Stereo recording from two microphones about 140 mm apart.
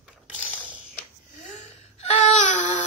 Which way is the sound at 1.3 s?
55° left (ahead or behind).